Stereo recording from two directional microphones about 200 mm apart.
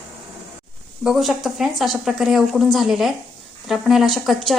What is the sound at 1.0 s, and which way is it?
Speech, centre (ahead or behind).